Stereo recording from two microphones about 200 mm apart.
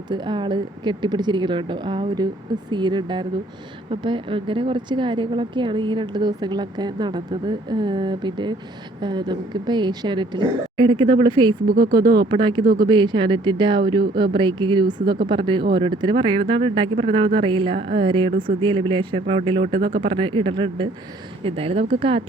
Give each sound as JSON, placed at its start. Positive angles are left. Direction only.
{"t": 0.1, "sound": "speech", "side_deg": -25}